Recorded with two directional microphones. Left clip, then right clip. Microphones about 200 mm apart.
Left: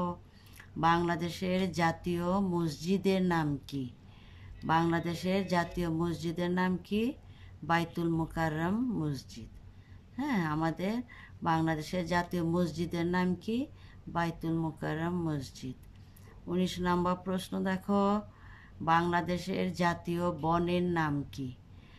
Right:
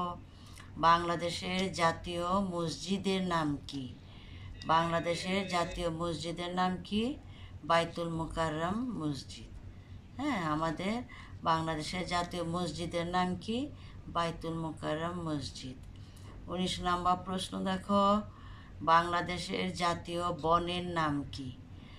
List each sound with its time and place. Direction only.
0.7 s speech: 55° left (ahead or behind)